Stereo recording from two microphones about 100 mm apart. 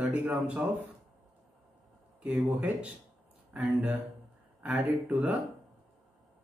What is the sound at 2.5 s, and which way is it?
Speech, 15° right (ahead or behind).